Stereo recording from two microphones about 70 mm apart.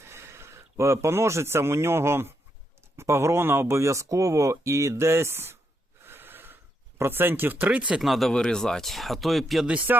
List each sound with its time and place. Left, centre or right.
0.0 s speech: right
6.0 s gasp: right
7.0 s speech: right
8.0 s speech: centre
8.3 s speech: centre
9.6 s speech: right